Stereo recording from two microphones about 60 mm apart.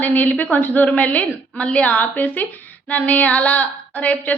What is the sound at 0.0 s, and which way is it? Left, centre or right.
Speech, left.